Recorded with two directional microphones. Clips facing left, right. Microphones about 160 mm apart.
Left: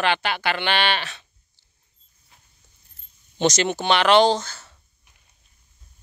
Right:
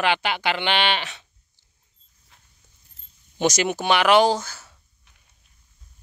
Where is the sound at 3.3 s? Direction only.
10° right (ahead or behind).